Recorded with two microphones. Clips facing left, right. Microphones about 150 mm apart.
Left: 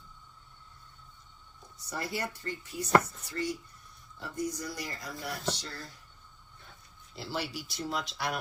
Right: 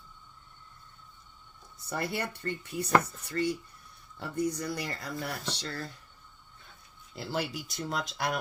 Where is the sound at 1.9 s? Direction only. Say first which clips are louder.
Right 2 dB; 55° right (ahead or behind).